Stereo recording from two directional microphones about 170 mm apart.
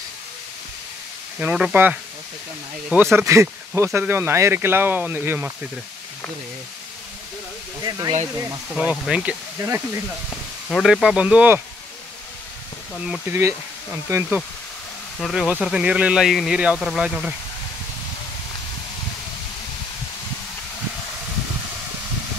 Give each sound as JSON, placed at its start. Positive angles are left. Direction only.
{"t": 1.4, "sound": "speech", "side_deg": -5}
{"t": 7.8, "sound": "speech", "side_deg": -25}
{"t": 8.7, "sound": "speech", "side_deg": 0}
{"t": 10.7, "sound": "speech", "side_deg": 0}
{"t": 13.0, "sound": "speech", "side_deg": -5}
{"t": 14.0, "sound": "speech", "side_deg": -15}
{"t": 15.1, "sound": "speech", "side_deg": 5}